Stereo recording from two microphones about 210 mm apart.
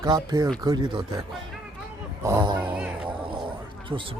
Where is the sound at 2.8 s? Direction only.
5° right (ahead or behind).